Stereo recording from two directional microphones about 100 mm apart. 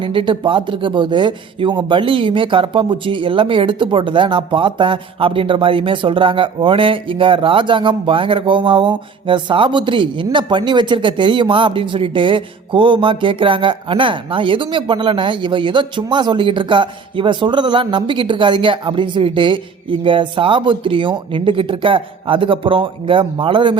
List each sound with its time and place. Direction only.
0.0 s speech: 60° right (ahead or behind)